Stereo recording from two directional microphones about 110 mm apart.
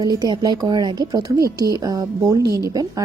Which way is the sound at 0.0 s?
40° right (ahead or behind).